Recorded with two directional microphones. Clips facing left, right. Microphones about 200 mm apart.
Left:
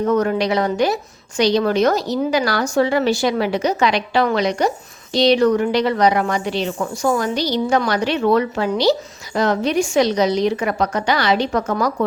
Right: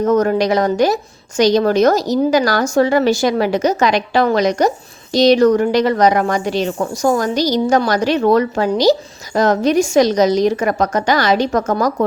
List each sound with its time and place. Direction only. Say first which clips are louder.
0.0 s a woman's voice: right 3 dB; 45° right (ahead or behind)